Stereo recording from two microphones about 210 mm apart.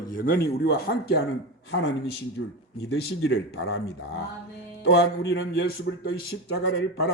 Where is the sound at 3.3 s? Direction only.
80° left.